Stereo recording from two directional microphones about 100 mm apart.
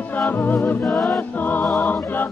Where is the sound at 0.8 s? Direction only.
Centre (ahead or behind).